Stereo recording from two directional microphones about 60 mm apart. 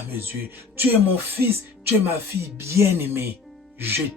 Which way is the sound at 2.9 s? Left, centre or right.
Right.